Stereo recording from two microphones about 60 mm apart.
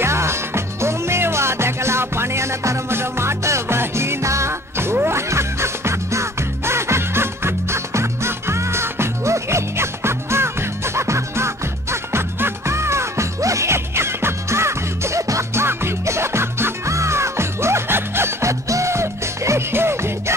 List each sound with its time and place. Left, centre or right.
0.0 s music: right